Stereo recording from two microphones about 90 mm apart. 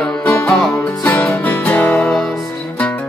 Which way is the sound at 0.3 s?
20° left (ahead or behind).